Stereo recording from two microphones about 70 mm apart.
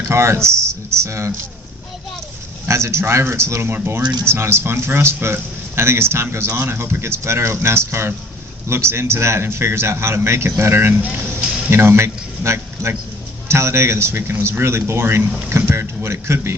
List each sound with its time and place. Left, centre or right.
0.1 s speech: right
2.6 s a man's voice: right